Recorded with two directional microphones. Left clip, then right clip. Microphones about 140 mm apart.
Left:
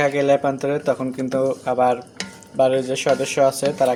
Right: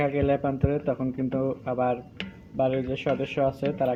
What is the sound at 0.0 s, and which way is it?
Speech, 25° left (ahead or behind).